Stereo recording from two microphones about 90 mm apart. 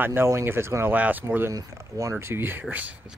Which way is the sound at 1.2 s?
30° right (ahead or behind).